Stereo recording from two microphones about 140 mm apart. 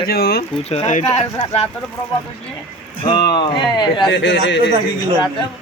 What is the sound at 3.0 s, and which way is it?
Speech, 35° left (ahead or behind).